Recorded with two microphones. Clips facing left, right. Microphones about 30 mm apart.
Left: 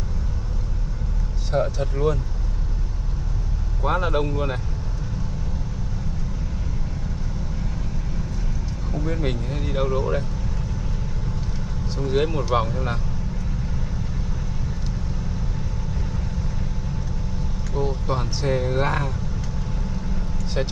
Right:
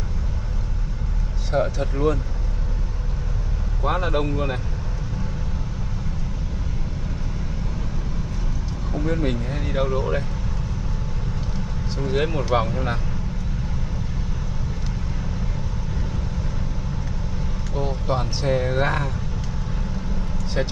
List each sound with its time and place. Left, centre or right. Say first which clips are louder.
1.6 s speech: right 1 dB; centre
3.8 s speech: even; centre
9.2 s speech: right 2 dB; centre
11.9 s speech: left 1 dB; centre
17.7 s speech: even; centre